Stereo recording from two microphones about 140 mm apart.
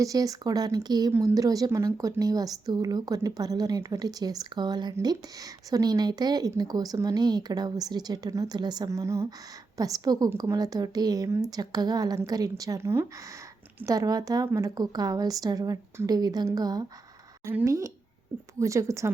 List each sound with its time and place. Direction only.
0.0 s a woman's voice: 25° right (ahead or behind)